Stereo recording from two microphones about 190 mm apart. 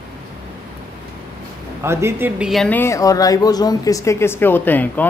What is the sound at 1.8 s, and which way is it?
Speech, 15° right (ahead or behind).